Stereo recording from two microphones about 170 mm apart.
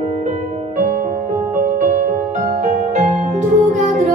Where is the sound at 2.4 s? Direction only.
50° right (ahead or behind).